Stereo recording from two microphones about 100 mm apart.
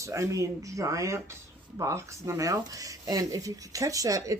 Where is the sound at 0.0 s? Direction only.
30° right (ahead or behind).